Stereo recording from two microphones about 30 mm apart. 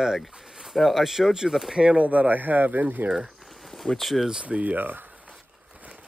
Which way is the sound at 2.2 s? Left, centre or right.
Right.